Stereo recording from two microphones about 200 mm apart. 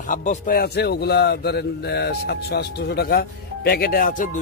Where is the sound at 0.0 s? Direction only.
40° left (ahead or behind).